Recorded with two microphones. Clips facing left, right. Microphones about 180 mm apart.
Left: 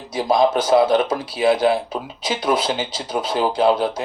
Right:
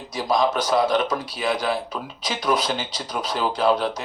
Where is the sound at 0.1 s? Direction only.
25° left (ahead or behind).